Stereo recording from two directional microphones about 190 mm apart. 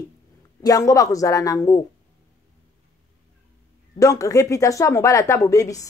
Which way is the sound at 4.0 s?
15° left (ahead or behind).